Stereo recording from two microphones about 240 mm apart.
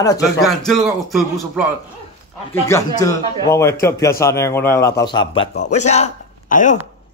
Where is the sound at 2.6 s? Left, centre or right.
Centre.